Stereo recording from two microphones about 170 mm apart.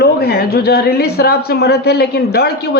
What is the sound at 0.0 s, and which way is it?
Speech, 65° left (ahead or behind).